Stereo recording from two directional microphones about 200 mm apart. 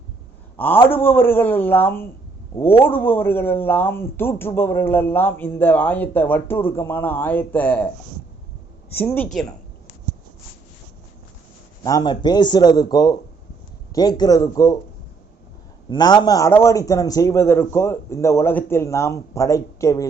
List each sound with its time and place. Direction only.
0.5 s a man's voice: 10° left (ahead or behind)
9.0 s speech: 10° left (ahead or behind)
11.8 s a man's voice: 20° left (ahead or behind)
15.9 s speech: 20° left (ahead or behind)